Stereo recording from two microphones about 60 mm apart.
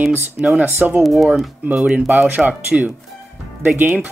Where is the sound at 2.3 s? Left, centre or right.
Right.